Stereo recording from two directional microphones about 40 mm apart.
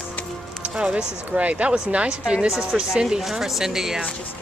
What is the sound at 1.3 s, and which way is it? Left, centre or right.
Speech, right.